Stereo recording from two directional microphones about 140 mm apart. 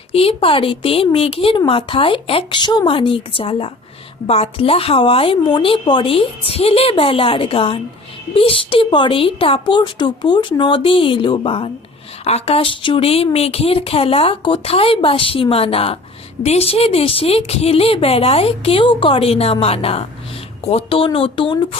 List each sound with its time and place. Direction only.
0.1 s speech: 45° left (ahead or behind)